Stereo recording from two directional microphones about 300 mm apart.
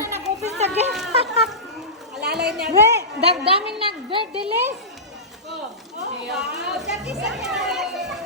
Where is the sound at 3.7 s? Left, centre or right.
Centre.